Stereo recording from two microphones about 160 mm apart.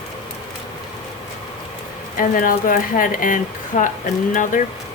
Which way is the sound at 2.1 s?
60° left (ahead or behind).